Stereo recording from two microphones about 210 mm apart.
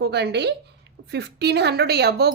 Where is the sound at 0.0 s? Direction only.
50° right (ahead or behind).